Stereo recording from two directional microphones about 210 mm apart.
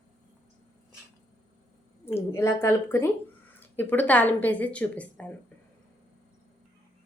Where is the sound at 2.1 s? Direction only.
10° left (ahead or behind).